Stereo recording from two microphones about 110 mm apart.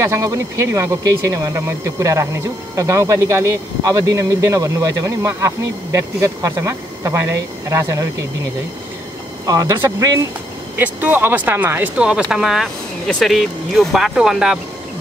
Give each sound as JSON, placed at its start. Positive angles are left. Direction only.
{"t": 0.0, "sound": "speech", "side_deg": -25}
{"t": 9.5, "sound": "speech", "side_deg": -35}
{"t": 10.8, "sound": "speech", "side_deg": -15}